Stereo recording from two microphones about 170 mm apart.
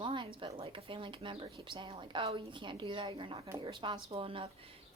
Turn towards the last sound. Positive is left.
turn(degrees=-30)  # may be behind; listen again after turning